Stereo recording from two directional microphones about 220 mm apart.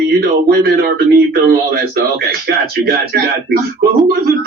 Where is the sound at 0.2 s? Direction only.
45° right (ahead or behind).